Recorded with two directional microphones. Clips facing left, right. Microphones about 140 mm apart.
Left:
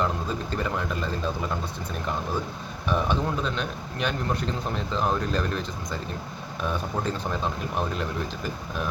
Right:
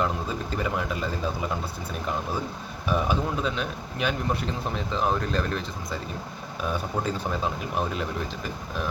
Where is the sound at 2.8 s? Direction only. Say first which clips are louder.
Even; 5° right (ahead or behind).